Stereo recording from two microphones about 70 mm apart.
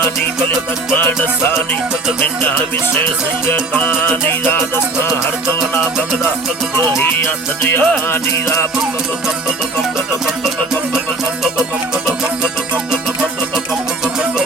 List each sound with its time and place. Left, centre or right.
0.9 s music: left
7.0 s music: left
12.0 s music: centre
14.0 s music: centre